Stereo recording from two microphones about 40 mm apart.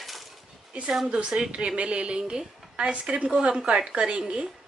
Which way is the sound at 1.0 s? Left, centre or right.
Centre.